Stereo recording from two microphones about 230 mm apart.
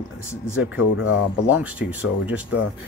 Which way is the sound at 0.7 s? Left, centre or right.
Left.